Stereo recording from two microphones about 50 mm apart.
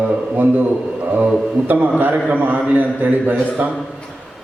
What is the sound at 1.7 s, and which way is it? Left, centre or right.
A man's voice, right.